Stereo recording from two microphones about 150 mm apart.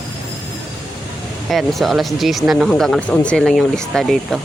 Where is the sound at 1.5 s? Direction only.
Centre (ahead or behind).